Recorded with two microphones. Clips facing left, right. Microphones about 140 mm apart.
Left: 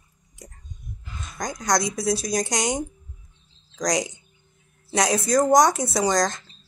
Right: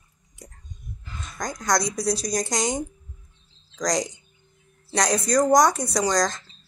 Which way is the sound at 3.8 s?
Centre (ahead or behind).